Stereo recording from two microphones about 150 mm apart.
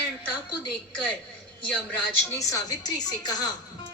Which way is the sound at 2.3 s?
25° left (ahead or behind).